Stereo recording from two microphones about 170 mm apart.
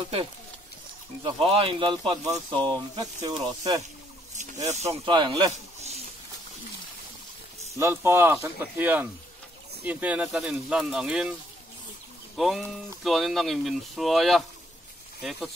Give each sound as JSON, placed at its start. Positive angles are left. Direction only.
{"t": 1.2, "sound": "speech", "side_deg": -35}
{"t": 4.6, "sound": "speech", "side_deg": -40}
{"t": 5.1, "sound": "speech", "side_deg": -25}
{"t": 7.7, "sound": "speech", "side_deg": -15}
{"t": 12.4, "sound": "speech", "side_deg": 0}